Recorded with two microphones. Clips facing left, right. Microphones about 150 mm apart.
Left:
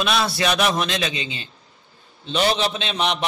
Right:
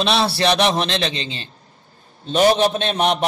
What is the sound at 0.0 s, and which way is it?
A man's voice, 30° right (ahead or behind).